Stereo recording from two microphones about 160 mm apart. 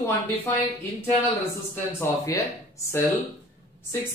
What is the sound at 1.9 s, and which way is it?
Speech, 20° left (ahead or behind).